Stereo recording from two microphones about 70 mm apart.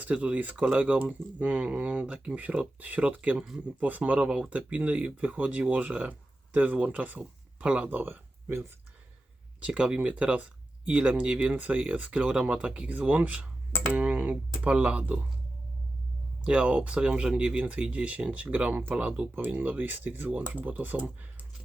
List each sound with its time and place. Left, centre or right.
0.0 s speech: centre
9.6 s speech: centre
16.4 s speech: centre